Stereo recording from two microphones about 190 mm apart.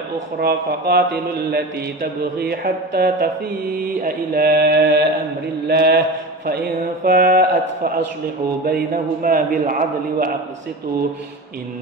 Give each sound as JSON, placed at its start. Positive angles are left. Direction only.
{"t": 0.4, "sound": "mantra", "side_deg": -55}
{"t": 6.4, "sound": "a man's voice", "side_deg": -55}